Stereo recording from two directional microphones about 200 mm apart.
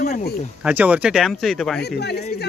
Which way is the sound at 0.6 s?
10° right (ahead or behind).